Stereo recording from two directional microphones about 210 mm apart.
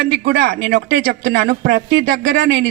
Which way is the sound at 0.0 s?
50° right (ahead or behind).